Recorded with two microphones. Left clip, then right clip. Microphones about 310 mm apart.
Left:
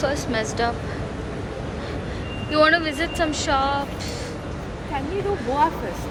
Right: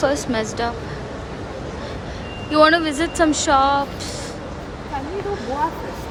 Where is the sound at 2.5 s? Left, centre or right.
Centre.